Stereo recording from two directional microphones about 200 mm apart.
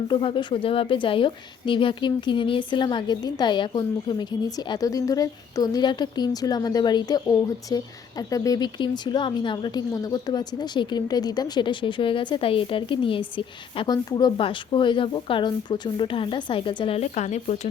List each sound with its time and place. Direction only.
0.1 s a woman's voice: 25° left (ahead or behind)